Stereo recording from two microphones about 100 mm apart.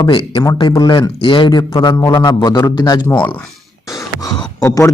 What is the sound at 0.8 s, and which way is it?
A man's voice, 45° left (ahead or behind).